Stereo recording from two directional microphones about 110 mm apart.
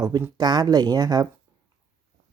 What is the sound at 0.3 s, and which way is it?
Speech, 40° right (ahead or behind).